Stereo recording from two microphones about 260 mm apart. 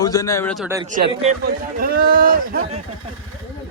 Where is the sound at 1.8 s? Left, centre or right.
Right.